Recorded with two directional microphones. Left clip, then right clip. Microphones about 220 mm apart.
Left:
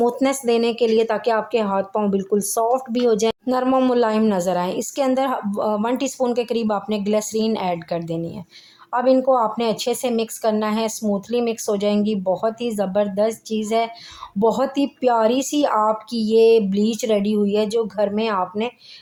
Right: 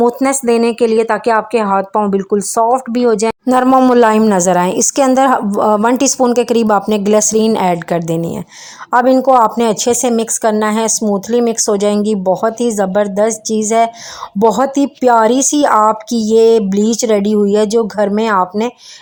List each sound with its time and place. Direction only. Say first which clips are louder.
0.0 s a woman's voice: right 7 dB; 25° right (ahead or behind)